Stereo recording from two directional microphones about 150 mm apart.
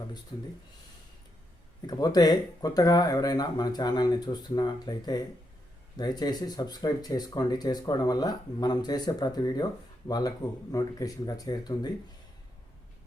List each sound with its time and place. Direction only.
0.3 s speech: 35° left (ahead or behind)
1.9 s speech: 25° left (ahead or behind)